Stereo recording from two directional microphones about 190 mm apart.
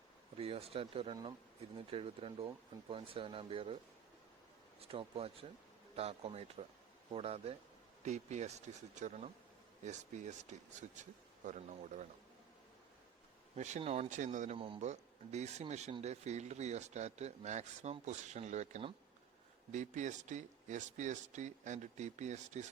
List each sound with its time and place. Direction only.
0.3 s speech: 30° right (ahead or behind)
4.8 s speech: 30° right (ahead or behind)
13.6 s speech: 35° right (ahead or behind)